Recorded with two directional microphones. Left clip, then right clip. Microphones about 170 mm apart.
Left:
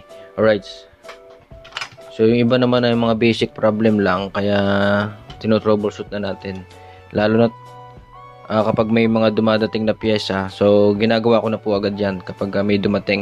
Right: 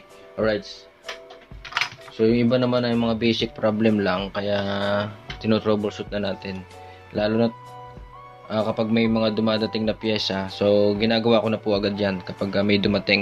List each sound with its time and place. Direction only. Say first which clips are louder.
1.7 s speech: right 4 dB; 50° left (ahead or behind); by 6.6 s 30° left (ahead or behind)
7.1 s speech: left 6 dB; 40° left (ahead or behind); by 13.2 s 25° left (ahead or behind)